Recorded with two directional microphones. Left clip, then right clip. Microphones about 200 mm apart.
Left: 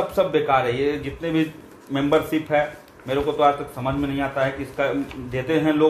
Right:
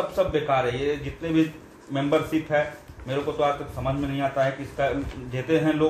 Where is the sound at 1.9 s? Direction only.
35° left (ahead or behind).